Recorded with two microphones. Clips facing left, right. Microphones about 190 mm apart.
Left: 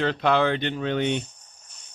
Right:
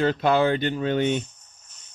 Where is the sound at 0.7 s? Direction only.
40° right (ahead or behind).